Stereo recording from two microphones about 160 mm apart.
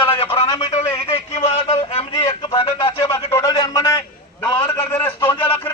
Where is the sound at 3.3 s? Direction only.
20° left (ahead or behind).